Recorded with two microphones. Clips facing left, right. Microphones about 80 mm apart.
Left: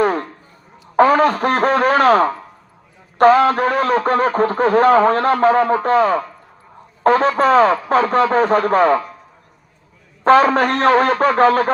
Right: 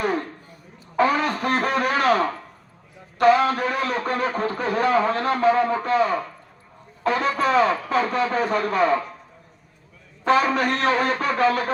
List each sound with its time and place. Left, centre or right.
0.0 s a sound: left
3.2 s speech: left
10.2 s music: left